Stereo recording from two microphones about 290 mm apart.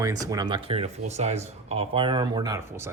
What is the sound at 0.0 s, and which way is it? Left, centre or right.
A man's voice, centre.